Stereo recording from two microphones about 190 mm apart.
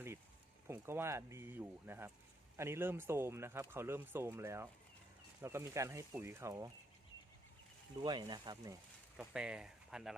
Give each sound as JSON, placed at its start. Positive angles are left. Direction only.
{"t": 0.7, "sound": "speech", "side_deg": -10}
{"t": 7.9, "sound": "speech", "side_deg": -25}
{"t": 9.1, "sound": "speech", "side_deg": -5}